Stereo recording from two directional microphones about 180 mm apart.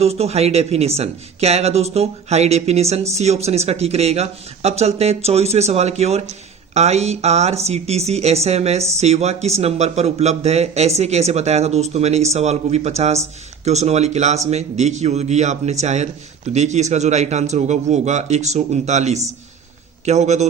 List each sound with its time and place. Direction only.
0.0 s speech: 35° right (ahead or behind)